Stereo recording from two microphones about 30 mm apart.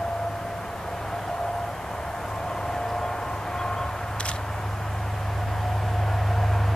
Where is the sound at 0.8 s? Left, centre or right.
Centre.